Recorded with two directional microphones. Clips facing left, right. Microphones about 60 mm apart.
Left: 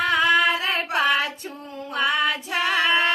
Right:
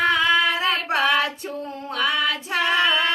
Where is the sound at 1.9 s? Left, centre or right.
Left.